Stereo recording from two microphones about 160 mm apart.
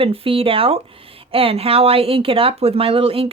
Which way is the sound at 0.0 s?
35° right (ahead or behind).